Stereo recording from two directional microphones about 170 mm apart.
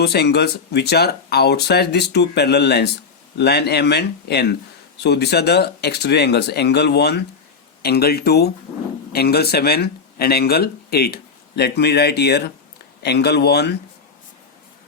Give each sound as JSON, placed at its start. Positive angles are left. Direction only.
{"t": 0.0, "sound": "speech", "side_deg": 70}